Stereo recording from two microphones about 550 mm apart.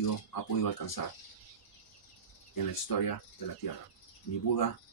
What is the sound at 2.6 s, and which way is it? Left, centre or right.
Speech, left.